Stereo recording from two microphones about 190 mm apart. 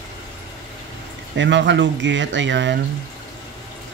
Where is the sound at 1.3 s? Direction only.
70° right (ahead or behind).